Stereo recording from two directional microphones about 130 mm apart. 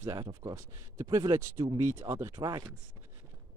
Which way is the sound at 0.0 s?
25° right (ahead or behind).